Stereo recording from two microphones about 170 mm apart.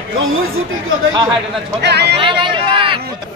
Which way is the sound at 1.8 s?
80° right.